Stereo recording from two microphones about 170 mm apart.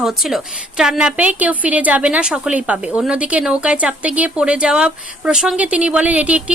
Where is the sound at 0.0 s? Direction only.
Centre (ahead or behind).